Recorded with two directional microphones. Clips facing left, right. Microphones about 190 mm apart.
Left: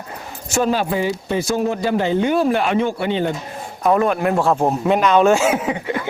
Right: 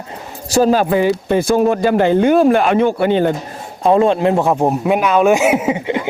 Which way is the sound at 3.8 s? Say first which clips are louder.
Right 4 dB; 25° right (ahead or behind).